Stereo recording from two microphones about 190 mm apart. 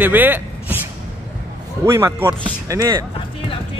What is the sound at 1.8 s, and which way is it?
Speech, 15° right (ahead or behind).